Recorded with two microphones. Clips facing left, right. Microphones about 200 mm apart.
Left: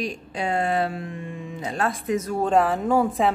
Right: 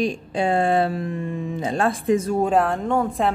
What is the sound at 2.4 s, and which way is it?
Speech, centre (ahead or behind).